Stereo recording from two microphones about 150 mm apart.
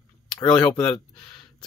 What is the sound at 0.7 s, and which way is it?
Speech, 5° left (ahead or behind).